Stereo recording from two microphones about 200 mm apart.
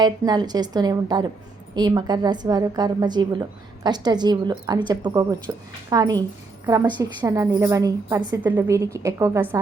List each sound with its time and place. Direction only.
0.0 s a woman's voice: 20° right (ahead or behind)